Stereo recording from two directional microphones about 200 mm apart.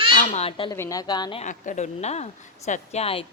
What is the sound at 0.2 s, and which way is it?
A woman's voice, 30° left (ahead or behind).